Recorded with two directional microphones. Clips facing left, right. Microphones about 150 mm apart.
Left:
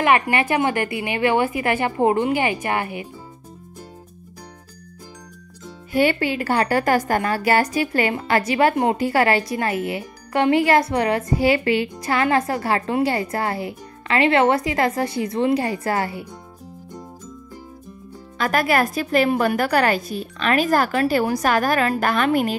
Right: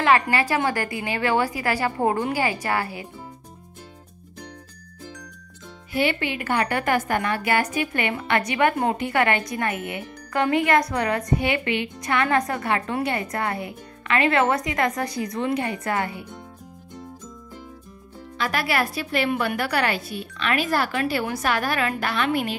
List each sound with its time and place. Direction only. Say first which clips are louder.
0.0 s a woman's voice: left 2 dB; 20° left (ahead or behind)
5.9 s speech: left 5 dB; 45° left (ahead or behind)
18.4 s a woman's voice: left 5 dB; 45° left (ahead or behind)